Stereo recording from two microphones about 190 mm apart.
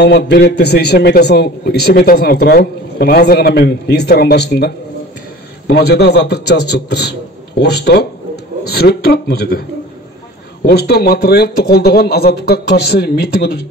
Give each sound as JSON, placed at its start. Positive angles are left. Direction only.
{"t": 0.0, "sound": "a man's voice", "side_deg": 60}